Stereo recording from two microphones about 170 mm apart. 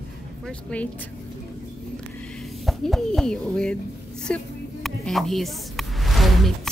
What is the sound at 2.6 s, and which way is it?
Speech, centre (ahead or behind).